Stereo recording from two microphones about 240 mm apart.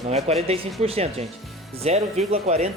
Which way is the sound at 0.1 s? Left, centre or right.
Right.